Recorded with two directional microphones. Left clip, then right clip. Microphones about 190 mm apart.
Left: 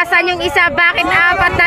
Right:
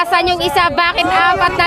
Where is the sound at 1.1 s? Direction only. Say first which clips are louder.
Right 1 dB; 10° left (ahead or behind).